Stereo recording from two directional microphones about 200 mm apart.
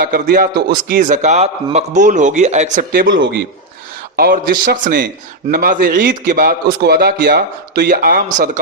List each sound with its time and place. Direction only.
0.1 s a man's voice: 50° right (ahead or behind)
3.1 s a man's voice: 60° right (ahead or behind)
4.2 s a man's voice: 45° right (ahead or behind)